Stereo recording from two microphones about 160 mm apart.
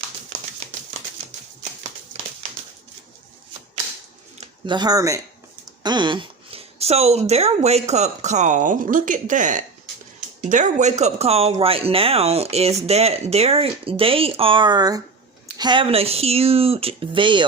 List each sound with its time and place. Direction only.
4.6 s a woman's voice: 25° right (ahead or behind)